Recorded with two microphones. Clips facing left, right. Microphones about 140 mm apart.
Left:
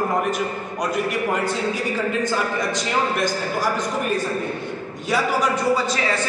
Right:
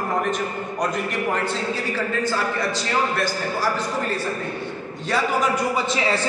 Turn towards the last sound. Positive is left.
turn(degrees=-25)  # may be behind; listen again after turning